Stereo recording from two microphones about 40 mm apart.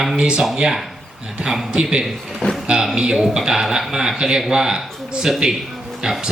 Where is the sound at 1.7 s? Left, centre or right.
Right.